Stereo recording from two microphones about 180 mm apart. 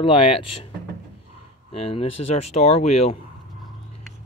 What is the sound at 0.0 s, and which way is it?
Speech, 30° left (ahead or behind).